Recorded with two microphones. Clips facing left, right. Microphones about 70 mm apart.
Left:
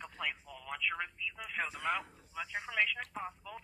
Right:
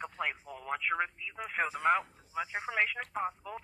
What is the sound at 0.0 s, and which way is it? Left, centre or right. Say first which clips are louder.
Speech: right 4 dB; right.